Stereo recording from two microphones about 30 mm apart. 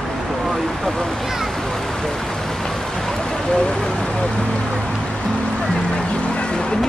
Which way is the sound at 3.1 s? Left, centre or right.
Centre.